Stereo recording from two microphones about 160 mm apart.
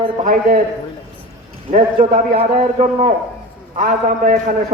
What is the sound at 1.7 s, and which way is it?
A man's voice, 45° right (ahead or behind).